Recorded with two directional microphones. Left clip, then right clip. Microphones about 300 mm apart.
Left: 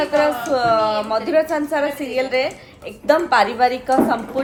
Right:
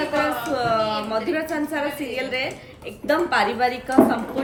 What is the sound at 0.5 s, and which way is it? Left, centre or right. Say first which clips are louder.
A woman's voice: left 5 dB; centre.